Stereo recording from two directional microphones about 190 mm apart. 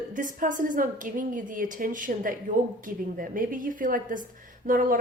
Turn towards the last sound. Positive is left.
turn(degrees=-45)  # may be behind; listen again after turning